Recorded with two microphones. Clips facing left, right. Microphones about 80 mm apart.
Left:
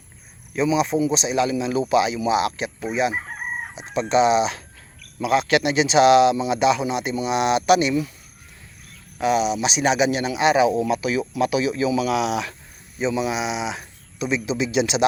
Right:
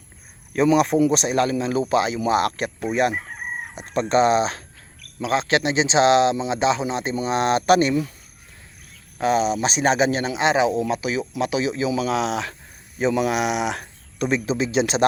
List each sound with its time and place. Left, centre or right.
0.5 s speech: right
5.2 s speech: right
9.2 s speech: right
13.0 s speech: right
14.6 s speech: right